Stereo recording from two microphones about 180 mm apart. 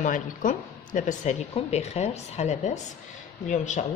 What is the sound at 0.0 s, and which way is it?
A woman's voice, 45° left (ahead or behind).